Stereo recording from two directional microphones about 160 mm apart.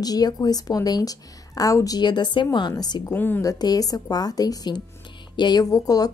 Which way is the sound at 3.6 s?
25° left (ahead or behind).